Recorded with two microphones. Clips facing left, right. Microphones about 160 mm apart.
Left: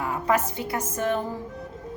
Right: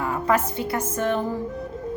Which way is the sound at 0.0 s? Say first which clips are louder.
Right 2 dB; 15° left (ahead or behind).